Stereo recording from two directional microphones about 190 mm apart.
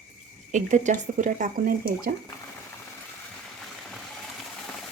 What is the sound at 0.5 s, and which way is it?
Speech, 40° right (ahead or behind).